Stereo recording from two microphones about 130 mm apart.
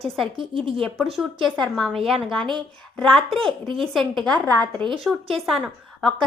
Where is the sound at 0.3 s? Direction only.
45° right (ahead or behind).